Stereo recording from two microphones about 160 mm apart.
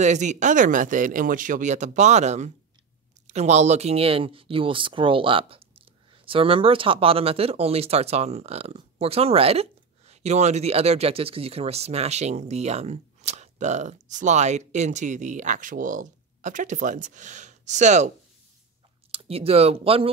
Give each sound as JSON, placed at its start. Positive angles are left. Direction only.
{"t": 0.0, "sound": "speech", "side_deg": -50}
{"t": 19.1, "sound": "speech", "side_deg": -35}